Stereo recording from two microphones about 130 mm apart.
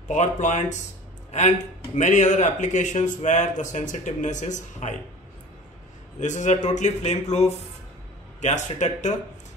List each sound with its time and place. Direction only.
0.1 s a man's voice: 65° left (ahead or behind)
2.0 s a man's voice: 70° left (ahead or behind)
6.1 s a man's voice: 70° left (ahead or behind)